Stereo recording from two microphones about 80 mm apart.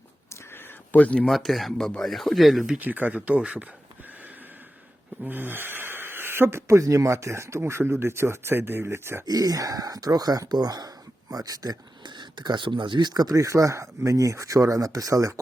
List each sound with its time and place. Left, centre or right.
0.5 s a sound: centre
1.3 s speech: centre
2.7 s speech: right
5.2 s speech: right
9.2 s speech: right